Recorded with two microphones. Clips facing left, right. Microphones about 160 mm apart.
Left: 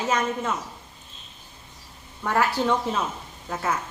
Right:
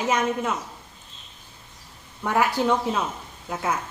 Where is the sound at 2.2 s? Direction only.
10° right (ahead or behind).